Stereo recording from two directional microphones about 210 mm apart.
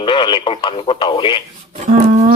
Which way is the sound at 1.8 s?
40° right (ahead or behind).